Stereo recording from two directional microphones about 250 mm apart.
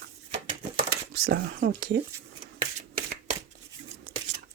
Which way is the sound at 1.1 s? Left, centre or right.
Right.